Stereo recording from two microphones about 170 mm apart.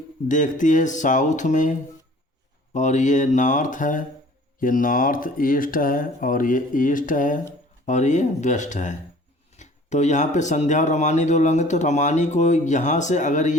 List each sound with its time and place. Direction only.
0.3 s speech: 50° left (ahead or behind)